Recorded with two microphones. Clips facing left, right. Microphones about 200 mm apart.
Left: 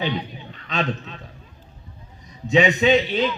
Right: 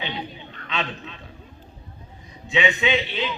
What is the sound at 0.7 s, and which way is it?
Speech, 45° left (ahead or behind).